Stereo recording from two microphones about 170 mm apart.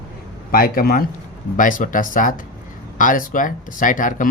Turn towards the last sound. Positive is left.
turn(degrees=50)  # may be behind; listen again after turning